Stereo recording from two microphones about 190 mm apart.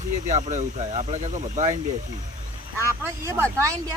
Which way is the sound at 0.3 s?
40° right (ahead or behind).